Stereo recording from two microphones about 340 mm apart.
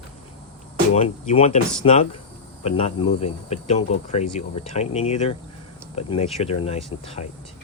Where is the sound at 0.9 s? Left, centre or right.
Centre.